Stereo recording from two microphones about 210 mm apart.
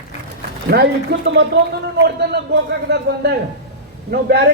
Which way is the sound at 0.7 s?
50° right (ahead or behind).